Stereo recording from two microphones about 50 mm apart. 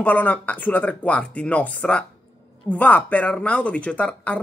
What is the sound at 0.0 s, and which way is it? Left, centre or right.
Speech, left.